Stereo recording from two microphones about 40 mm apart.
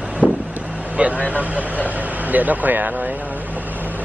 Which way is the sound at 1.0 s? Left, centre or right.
Right.